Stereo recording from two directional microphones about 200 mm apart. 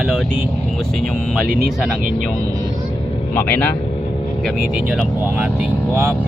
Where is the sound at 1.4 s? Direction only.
45° right (ahead or behind).